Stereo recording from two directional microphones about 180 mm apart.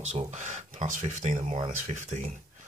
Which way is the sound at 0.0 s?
40° right (ahead or behind).